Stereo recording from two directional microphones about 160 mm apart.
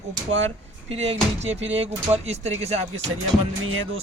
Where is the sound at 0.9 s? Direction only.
40° right (ahead or behind).